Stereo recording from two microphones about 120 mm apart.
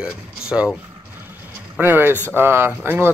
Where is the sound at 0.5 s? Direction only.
Centre (ahead or behind).